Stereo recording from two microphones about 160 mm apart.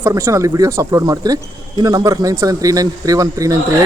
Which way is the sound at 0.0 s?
15° right (ahead or behind).